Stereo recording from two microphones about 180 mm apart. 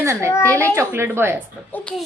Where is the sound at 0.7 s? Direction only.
15° right (ahead or behind).